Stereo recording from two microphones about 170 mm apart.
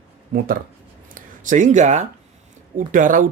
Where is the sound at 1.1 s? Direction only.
50° right (ahead or behind).